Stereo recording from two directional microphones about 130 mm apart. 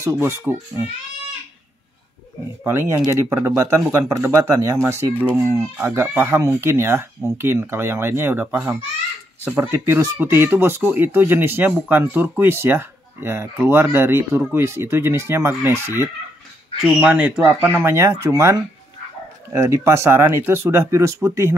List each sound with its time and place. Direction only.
0.0 s speech: 20° right (ahead or behind)
2.6 s speech: 20° right (ahead or behind)